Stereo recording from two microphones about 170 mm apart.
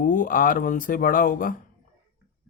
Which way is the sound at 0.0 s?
50° left (ahead or behind).